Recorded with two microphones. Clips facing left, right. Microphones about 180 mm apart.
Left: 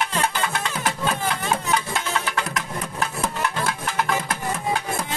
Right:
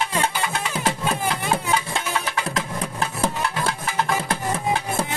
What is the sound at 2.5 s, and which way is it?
Music, 30° right (ahead or behind).